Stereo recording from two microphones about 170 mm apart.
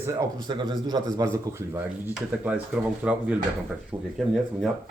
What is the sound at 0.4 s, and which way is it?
A man's voice, 25° right (ahead or behind).